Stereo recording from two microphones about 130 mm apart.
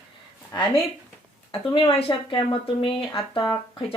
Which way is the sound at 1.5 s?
40° left (ahead or behind).